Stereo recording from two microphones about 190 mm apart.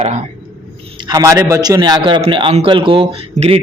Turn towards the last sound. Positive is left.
turn(degrees=-30)  # may be behind; listen again after turning